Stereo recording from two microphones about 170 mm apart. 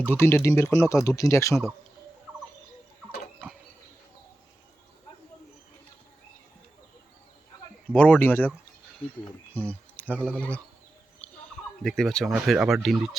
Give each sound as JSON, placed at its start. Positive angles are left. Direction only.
{"t": 0.0, "sound": "speech", "side_deg": 15}
{"t": 7.9, "sound": "speech", "side_deg": 10}
{"t": 9.5, "sound": "a sound", "side_deg": 10}
{"t": 10.3, "sound": "speech", "side_deg": 5}
{"t": 11.2, "sound": "turkey", "side_deg": 5}
{"t": 11.8, "sound": "speech", "side_deg": 5}